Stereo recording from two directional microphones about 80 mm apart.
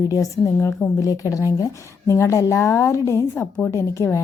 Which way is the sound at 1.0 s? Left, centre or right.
Left.